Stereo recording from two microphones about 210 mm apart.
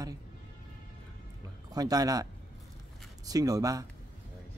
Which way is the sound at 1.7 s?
15° right (ahead or behind).